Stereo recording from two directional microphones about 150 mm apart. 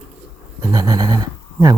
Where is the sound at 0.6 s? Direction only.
25° right (ahead or behind).